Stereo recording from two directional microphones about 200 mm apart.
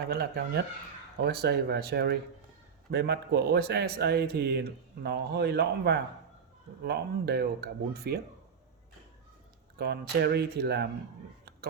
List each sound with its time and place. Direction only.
0.1 s speech: 50° right (ahead or behind)
9.7 s speech: 55° right (ahead or behind)